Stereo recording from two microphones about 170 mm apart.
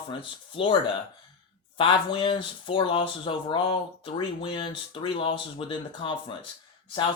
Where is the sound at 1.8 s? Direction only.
30° left (ahead or behind).